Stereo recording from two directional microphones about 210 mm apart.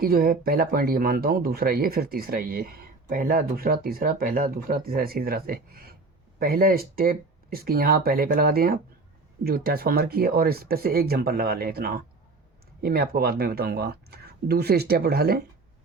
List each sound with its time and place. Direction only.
0.0 s speech: 45° right (ahead or behind)